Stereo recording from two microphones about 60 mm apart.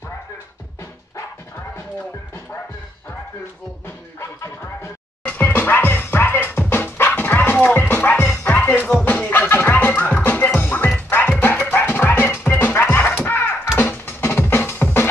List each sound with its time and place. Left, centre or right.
4.2 s music: left
5.2 s music: left